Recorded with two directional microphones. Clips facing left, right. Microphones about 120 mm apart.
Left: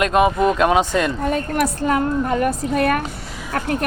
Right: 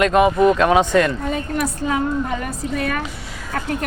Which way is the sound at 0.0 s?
15° left (ahead or behind).